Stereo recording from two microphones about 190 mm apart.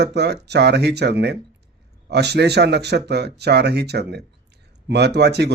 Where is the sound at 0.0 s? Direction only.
60° right (ahead or behind).